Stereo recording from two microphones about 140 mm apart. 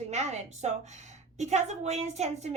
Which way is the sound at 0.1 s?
55° right (ahead or behind).